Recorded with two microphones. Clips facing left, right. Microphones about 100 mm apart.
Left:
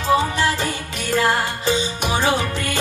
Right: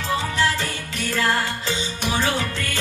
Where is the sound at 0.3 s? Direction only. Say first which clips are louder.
Left 2 dB; 15° left (ahead or behind).